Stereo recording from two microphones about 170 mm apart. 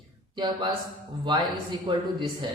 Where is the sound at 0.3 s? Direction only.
25° right (ahead or behind).